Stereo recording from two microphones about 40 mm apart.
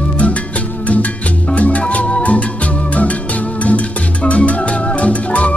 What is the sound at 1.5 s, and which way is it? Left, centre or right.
Music, left.